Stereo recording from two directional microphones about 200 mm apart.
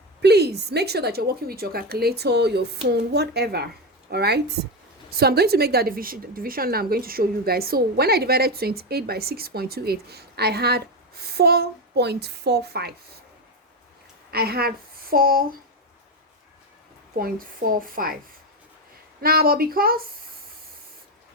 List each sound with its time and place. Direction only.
0.2 s a woman's voice: 55° right (ahead or behind)
14.3 s a woman's voice: 50° right (ahead or behind)
17.2 s a woman's voice: 45° right (ahead or behind)
19.2 s a woman's voice: 50° right (ahead or behind)